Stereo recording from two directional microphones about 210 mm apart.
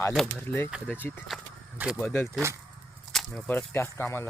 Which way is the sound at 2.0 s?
10° left (ahead or behind).